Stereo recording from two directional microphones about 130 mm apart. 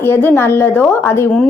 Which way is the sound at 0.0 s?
15° left (ahead or behind).